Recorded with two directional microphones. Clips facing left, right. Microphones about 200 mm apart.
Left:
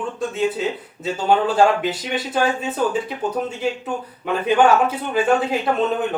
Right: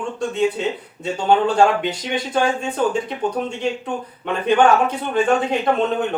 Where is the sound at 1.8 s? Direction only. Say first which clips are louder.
Even; 5° left (ahead or behind).